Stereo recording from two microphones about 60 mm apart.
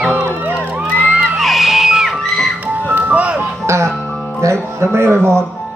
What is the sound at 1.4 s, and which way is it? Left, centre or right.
Music, centre.